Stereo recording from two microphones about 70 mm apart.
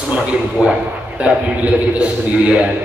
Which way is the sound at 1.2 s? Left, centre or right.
Centre.